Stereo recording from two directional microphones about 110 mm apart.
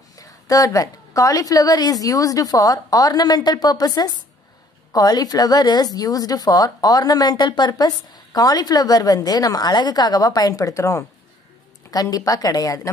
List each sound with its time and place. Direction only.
0.1 s a woman's voice: 30° left (ahead or behind)